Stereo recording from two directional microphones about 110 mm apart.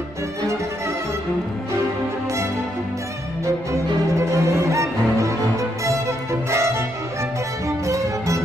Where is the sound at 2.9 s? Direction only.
30° right (ahead or behind).